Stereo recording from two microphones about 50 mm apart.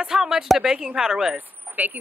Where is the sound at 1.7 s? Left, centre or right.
Right.